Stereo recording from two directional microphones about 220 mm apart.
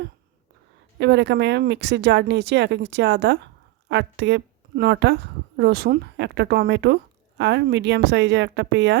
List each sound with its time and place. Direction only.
0.9 s a woman's voice: 50° right (ahead or behind)